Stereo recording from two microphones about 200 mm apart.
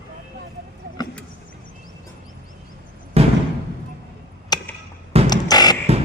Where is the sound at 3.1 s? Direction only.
30° right (ahead or behind).